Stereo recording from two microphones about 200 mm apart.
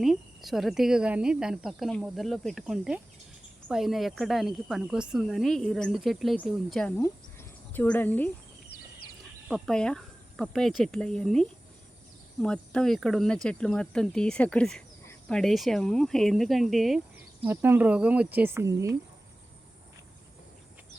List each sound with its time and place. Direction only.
0.0 s speech: centre (ahead or behind)
9.5 s speech: 5° left (ahead or behind)
17.4 s speech: 10° right (ahead or behind)